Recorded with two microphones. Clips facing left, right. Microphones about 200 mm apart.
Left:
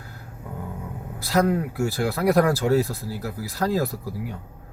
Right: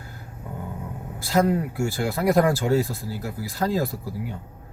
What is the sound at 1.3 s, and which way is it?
Speech, 15° right (ahead or behind).